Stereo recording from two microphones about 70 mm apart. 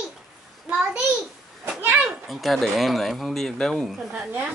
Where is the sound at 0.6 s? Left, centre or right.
Centre.